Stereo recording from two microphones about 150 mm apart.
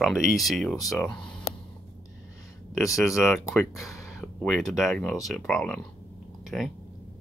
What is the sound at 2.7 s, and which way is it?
Speech, 20° left (ahead or behind).